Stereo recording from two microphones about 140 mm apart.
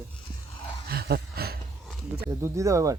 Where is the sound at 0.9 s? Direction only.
90° right.